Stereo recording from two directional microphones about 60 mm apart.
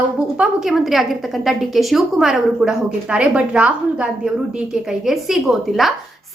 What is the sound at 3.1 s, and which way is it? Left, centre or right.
A woman's voice, centre.